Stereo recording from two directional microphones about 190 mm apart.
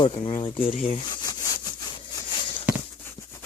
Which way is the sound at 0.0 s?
30° left (ahead or behind).